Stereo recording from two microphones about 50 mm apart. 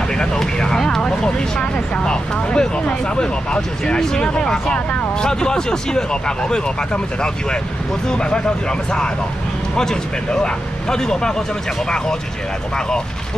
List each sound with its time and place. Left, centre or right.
0.1 s speech: centre